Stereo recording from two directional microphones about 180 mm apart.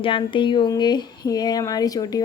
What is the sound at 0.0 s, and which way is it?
Speech, 30° left (ahead or behind).